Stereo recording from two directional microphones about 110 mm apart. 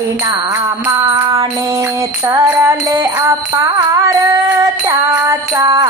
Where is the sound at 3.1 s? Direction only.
30° right (ahead or behind).